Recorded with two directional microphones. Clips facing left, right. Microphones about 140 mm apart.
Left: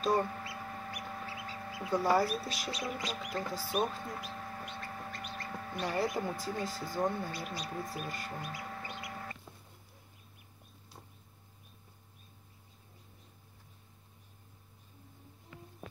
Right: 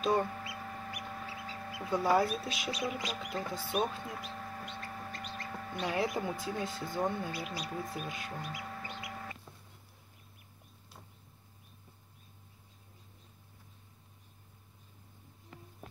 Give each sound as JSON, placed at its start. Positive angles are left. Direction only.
{"t": 0.0, "sound": "speech", "side_deg": 0}
{"t": 0.4, "sound": "chicken", "side_deg": 0}
{"t": 6.4, "sound": "speech", "side_deg": 0}